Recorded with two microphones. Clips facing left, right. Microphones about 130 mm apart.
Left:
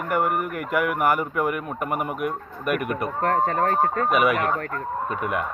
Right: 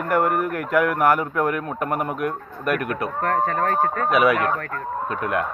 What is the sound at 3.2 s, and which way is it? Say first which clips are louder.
Speech: even; 30° left (ahead or behind).